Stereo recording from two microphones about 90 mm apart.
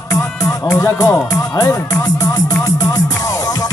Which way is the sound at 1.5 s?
40° left (ahead or behind).